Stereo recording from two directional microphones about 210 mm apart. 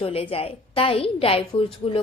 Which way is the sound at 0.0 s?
25° left (ahead or behind).